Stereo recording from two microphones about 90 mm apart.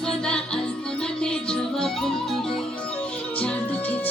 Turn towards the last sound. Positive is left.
turn(degrees=15)  # may be behind; listen again after turning